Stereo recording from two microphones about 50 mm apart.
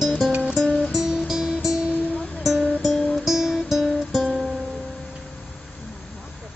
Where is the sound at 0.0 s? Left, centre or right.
Centre.